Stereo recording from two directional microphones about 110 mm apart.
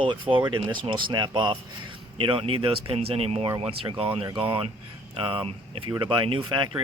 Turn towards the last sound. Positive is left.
turn(degrees=-50)  # may be behind; listen again after turning